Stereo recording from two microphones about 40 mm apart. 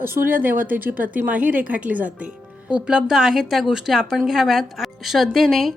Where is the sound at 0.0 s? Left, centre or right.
Right.